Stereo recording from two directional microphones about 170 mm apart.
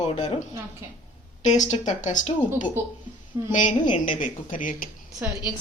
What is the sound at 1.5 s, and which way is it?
Speech, 45° left (ahead or behind).